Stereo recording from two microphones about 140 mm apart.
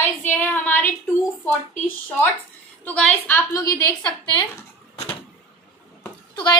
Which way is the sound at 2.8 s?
10° left (ahead or behind).